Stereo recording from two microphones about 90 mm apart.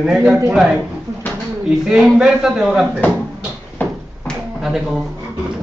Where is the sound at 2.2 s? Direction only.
10° right (ahead or behind).